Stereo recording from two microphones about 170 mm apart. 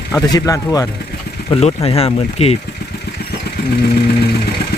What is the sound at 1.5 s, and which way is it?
Speech, 35° left (ahead or behind).